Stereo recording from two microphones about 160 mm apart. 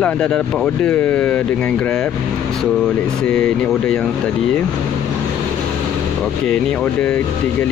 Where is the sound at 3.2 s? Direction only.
5° left (ahead or behind).